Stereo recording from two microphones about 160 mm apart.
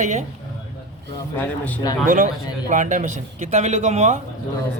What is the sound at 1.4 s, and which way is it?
Speech, 10° left (ahead or behind).